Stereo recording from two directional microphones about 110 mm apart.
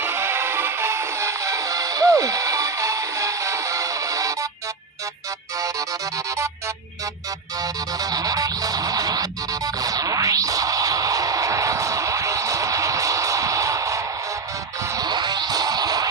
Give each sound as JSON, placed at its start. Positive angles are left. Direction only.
{"t": 0.0, "sound": "music", "side_deg": -25}
{"t": 7.6, "sound": "music", "side_deg": -35}